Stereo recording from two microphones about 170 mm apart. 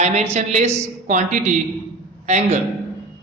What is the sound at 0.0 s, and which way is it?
A man's voice, 45° right (ahead or behind).